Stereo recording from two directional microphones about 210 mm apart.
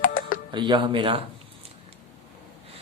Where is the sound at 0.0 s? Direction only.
40° left (ahead or behind).